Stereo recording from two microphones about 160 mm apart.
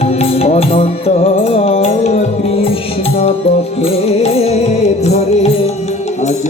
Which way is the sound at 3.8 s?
40° left (ahead or behind).